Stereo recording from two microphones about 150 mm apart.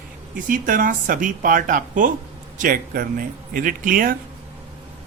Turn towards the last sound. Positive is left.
turn(degrees=-70)  # may be behind; listen again after turning